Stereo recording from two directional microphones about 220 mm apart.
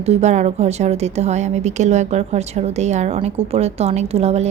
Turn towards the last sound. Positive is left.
turn(degrees=-30)  # may be behind; listen again after turning